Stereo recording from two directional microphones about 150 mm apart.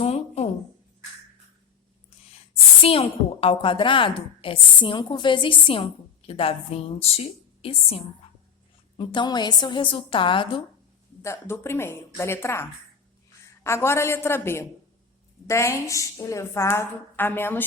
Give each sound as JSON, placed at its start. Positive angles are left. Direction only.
{"t": 0.0, "sound": "a sound", "side_deg": 45}
{"t": 2.8, "sound": "a woman's voice", "side_deg": 40}
{"t": 11.2, "sound": "a woman's voice", "side_deg": 15}
{"t": 13.7, "sound": "a woman's voice", "side_deg": 15}